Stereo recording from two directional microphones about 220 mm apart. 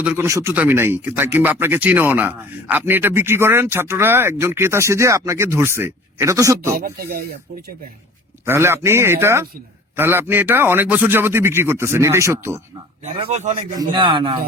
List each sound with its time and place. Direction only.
0.0 s speech: 10° right (ahead or behind)
6.7 s speech: 40° right (ahead or behind)
8.4 s speech: 10° right (ahead or behind)
13.1 s speech: 30° right (ahead or behind)